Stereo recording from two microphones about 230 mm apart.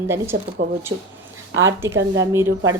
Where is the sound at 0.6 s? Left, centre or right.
Right.